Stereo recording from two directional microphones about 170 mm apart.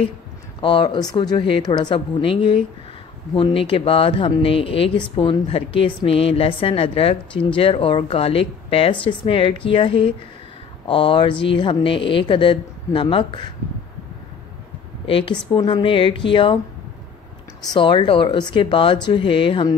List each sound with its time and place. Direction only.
0.6 s speech: 30° left (ahead or behind)
15.0 s speech: 30° left (ahead or behind)
17.7 s speech: 30° left (ahead or behind)